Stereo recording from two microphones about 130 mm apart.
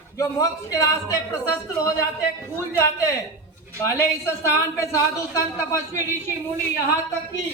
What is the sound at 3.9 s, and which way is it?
Speech, 20° left (ahead or behind).